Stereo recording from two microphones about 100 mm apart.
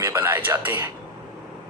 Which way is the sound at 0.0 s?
20° right (ahead or behind).